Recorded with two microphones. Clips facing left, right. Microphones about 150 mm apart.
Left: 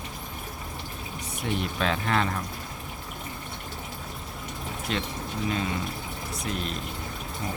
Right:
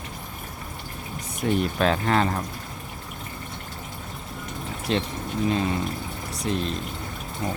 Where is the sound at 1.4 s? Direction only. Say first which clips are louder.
Right 6 dB; 45° right (ahead or behind).